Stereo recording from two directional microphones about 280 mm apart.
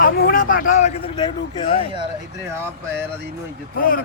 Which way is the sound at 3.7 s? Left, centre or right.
Left.